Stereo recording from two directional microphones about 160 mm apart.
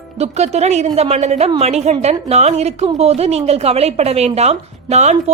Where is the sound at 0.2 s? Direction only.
40° right (ahead or behind).